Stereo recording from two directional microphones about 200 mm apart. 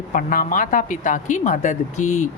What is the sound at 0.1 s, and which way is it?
A woman's voice, 45° left (ahead or behind).